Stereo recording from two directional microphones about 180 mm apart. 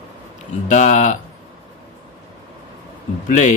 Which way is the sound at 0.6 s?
45° left (ahead or behind).